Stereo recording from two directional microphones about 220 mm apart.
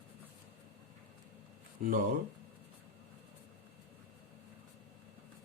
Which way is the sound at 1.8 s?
40° right (ahead or behind).